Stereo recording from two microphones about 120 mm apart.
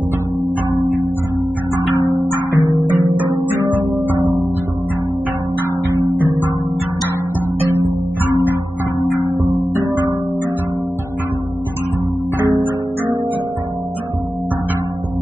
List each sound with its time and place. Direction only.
2.0 s music: 30° right (ahead or behind)